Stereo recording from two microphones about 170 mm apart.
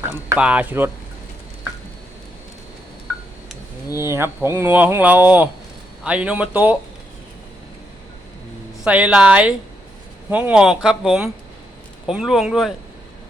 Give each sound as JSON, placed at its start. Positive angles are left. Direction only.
{"t": 0.0, "sound": "speech", "side_deg": -10}
{"t": 3.9, "sound": "speech", "side_deg": -15}
{"t": 8.8, "sound": "speech", "side_deg": -5}